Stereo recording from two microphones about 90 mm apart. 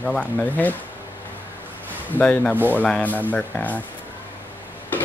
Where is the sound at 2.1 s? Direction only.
15° left (ahead or behind).